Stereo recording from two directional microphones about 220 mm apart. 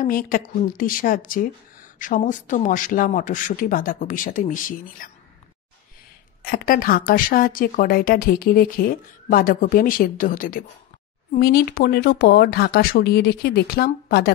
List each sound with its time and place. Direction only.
0.0 s a woman's voice: 40° left (ahead or behind)
6.4 s a woman's voice: 40° left (ahead or behind)